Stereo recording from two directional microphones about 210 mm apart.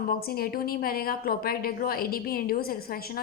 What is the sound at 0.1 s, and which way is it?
A woman's voice, 45° left (ahead or behind).